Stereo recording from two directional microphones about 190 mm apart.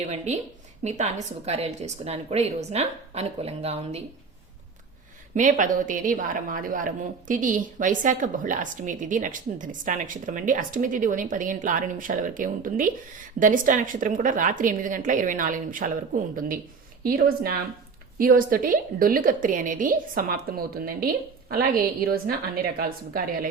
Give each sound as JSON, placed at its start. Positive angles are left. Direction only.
{"t": 0.9, "sound": "a woman's voice", "side_deg": -35}
{"t": 5.3, "sound": "a woman's voice", "side_deg": -40}